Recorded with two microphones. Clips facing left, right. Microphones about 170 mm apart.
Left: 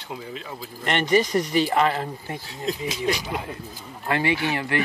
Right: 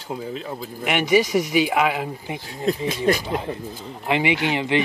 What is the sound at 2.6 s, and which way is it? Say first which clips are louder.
Speech: right 5 dB; 55° right (ahead or behind).